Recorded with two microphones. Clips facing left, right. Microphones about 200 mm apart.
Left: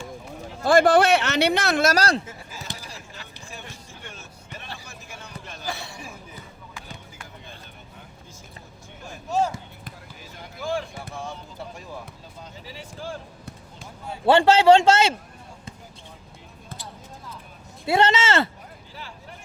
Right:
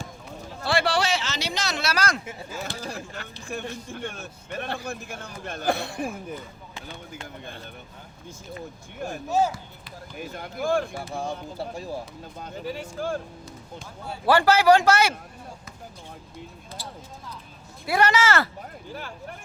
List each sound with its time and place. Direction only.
0.6 s speech: 45° left (ahead or behind)
2.6 s speech: 55° right (ahead or behind)
9.0 s speech: 55° right (ahead or behind)
11.1 s speech: 35° right (ahead or behind)
12.4 s speech: 55° right (ahead or behind)
14.1 s a man's voice: 25° left (ahead or behind)
17.8 s a man's voice: 25° left (ahead or behind)
18.9 s speech: 50° right (ahead or behind)